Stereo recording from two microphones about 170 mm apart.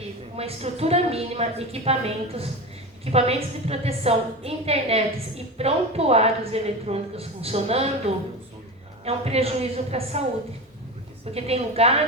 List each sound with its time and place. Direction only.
0.3 s speech: 35° right (ahead or behind)
11.3 s speech: 35° right (ahead or behind)